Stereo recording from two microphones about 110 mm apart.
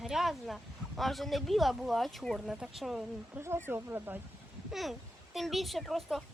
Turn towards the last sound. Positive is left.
turn(degrees=0)  # may be behind; listen again after turning